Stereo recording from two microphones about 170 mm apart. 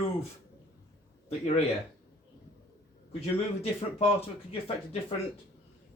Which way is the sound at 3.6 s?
35° left (ahead or behind).